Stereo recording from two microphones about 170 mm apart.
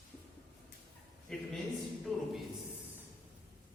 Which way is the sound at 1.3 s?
5° left (ahead or behind).